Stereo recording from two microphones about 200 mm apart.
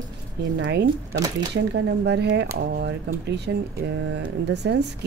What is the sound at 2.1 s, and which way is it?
Speech, 60° right (ahead or behind).